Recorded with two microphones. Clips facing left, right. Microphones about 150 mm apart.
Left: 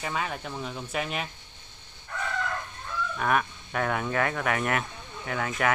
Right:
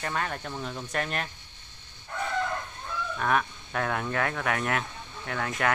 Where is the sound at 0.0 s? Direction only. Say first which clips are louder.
Even; 5° left (ahead or behind).